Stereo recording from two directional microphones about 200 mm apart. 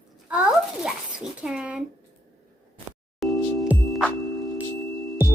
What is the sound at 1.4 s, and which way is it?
Speech, 5° right (ahead or behind).